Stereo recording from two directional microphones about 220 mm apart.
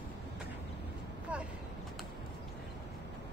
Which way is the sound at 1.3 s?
5° right (ahead or behind).